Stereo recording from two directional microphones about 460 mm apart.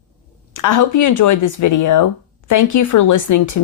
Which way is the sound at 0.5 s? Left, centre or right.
Left.